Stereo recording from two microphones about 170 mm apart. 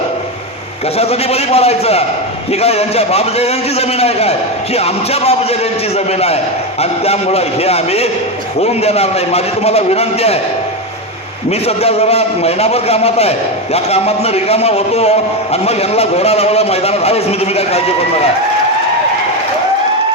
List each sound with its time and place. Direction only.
0.9 s a man's voice: 35° left (ahead or behind)
11.6 s a man's voice: 40° left (ahead or behind)